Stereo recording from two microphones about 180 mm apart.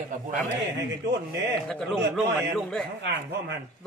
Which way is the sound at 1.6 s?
Centre (ahead or behind).